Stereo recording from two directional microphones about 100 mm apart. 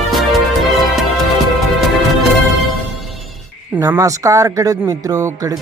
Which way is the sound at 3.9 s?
30° right (ahead or behind).